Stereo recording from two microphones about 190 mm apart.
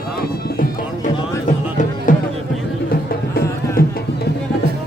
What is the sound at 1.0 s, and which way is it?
Music, 40° left (ahead or behind).